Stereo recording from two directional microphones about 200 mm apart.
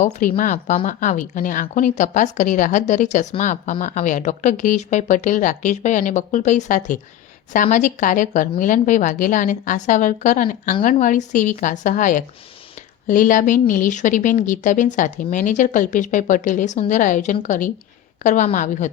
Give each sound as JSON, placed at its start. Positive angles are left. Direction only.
{"t": 0.0, "sound": "a woman's voice", "side_deg": 40}